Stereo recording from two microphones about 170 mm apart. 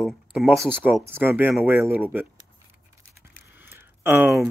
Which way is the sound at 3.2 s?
15° right (ahead or behind).